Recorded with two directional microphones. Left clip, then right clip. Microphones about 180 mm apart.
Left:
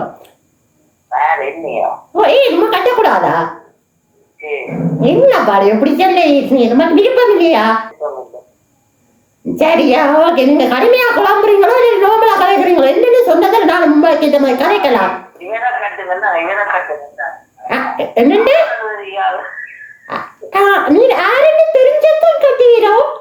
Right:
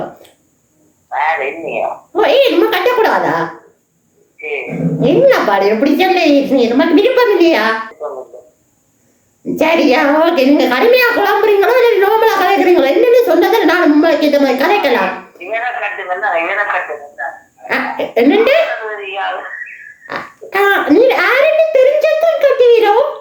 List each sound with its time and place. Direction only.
1.1 s a woman's voice: 20° right (ahead or behind)
4.4 s music: 15° right (ahead or behind)
5.3 s a child's voice: 15° right (ahead or behind)
9.6 s a child's voice: 15° right (ahead or behind)